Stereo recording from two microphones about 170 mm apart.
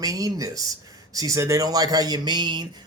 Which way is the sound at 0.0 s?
20° right (ahead or behind).